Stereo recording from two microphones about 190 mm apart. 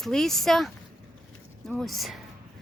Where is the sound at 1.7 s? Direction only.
Centre (ahead or behind).